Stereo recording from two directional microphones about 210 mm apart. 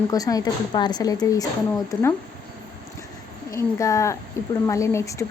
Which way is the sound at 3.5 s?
15° left (ahead or behind).